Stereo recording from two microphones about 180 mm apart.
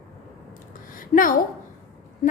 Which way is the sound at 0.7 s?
50° left (ahead or behind).